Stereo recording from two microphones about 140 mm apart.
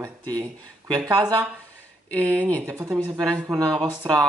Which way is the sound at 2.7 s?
20° right (ahead or behind).